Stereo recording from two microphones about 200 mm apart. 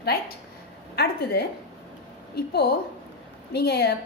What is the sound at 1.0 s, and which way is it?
A woman's voice, 50° left (ahead or behind).